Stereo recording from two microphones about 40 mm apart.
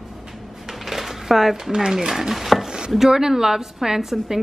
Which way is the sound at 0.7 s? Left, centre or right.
Centre.